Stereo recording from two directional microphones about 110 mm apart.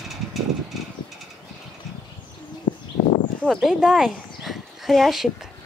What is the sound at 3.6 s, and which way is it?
Speech, 5° right (ahead or behind).